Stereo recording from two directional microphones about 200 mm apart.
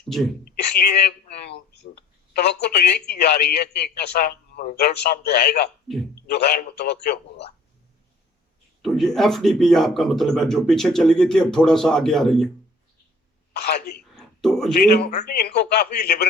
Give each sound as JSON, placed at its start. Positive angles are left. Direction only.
{"t": 0.4, "sound": "a sound", "side_deg": 55}
{"t": 2.3, "sound": "speech", "side_deg": 55}
{"t": 8.8, "sound": "a man's voice", "side_deg": 0}
{"t": 13.7, "sound": "speech", "side_deg": 55}
{"t": 14.1, "sound": "a sound", "side_deg": 0}
{"t": 15.2, "sound": "speech", "side_deg": 50}